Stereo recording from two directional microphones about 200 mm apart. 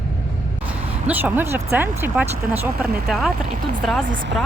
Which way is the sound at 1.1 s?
10° right (ahead or behind).